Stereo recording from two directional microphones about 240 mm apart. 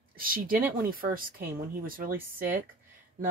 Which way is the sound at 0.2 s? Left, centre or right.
Right.